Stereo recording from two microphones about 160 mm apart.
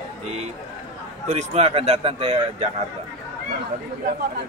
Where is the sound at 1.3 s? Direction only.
45° right (ahead or behind).